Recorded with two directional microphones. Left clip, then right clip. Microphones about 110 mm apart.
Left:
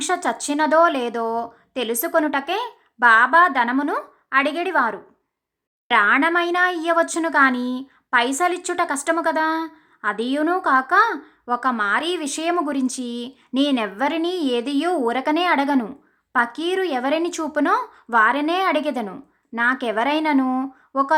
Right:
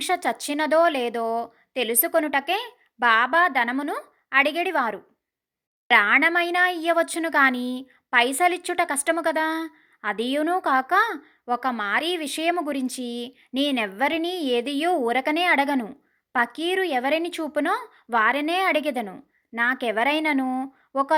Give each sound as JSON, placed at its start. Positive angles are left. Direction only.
{"t": 0.0, "sound": "a woman's voice", "side_deg": -15}